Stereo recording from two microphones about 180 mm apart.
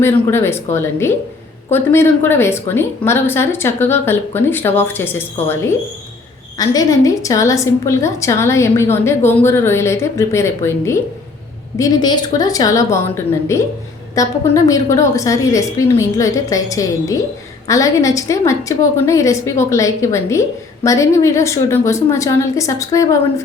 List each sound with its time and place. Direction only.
0.0 s a woman's voice: 15° left (ahead or behind)
6.6 s a woman's voice: 20° left (ahead or behind)